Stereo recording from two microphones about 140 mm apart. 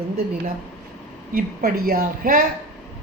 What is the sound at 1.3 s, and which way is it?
A woman's voice, 90° right.